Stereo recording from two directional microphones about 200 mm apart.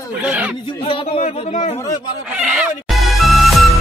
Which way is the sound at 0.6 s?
25° left (ahead or behind).